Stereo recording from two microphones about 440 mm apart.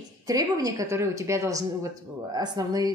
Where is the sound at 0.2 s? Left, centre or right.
Centre.